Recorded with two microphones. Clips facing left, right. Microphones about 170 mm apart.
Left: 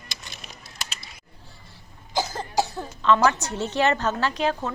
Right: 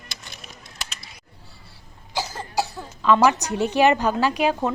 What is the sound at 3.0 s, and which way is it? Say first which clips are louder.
A woman's voice: right 2 dB; 10° right (ahead or behind).